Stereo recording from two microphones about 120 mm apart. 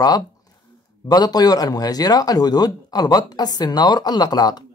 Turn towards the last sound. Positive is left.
turn(degrees=35)  # may be behind; listen again after turning